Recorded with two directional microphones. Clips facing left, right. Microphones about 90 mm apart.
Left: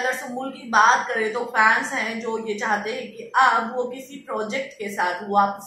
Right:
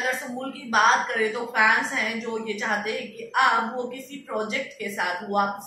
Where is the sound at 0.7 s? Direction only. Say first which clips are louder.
Left 3 dB; 25° left (ahead or behind).